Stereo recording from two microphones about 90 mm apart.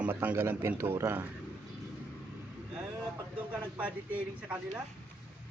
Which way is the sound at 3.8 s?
15° right (ahead or behind).